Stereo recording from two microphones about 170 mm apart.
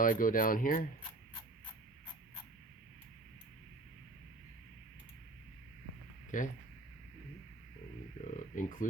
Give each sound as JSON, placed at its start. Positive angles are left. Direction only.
{"t": 0.0, "sound": "speech", "side_deg": 55}
{"t": 6.3, "sound": "speech", "side_deg": 50}
{"t": 8.2, "sound": "speech", "side_deg": 50}